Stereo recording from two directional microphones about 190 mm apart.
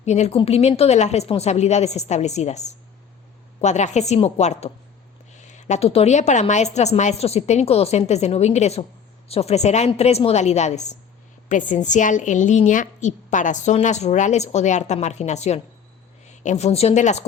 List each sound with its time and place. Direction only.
0.0 s a woman's voice: 35° left (ahead or behind)